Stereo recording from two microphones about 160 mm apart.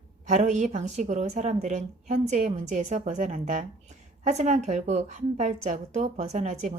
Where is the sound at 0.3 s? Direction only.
45° right (ahead or behind).